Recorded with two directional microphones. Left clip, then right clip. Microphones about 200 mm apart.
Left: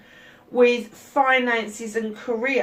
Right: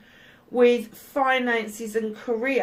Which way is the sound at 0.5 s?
45° right (ahead or behind).